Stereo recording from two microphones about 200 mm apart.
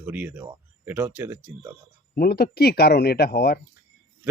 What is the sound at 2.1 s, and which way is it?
Speech, 50° left (ahead or behind).